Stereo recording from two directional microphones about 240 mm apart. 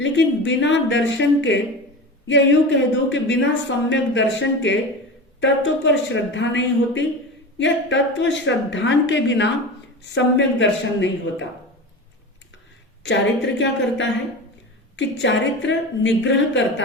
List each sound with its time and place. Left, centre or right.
0.0 s speech: left
13.0 s speech: left